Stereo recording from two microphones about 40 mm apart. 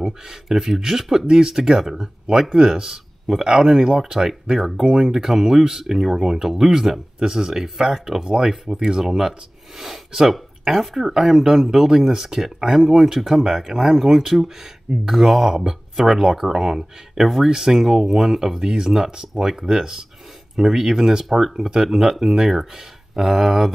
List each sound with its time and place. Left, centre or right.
0.0 s speech: centre
4.6 s speech: centre
4.8 s speech: centre